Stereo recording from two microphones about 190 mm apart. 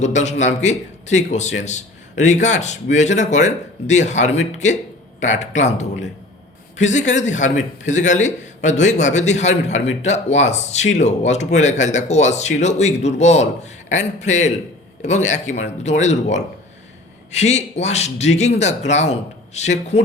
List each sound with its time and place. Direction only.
0.0 s a man's voice: 35° left (ahead or behind)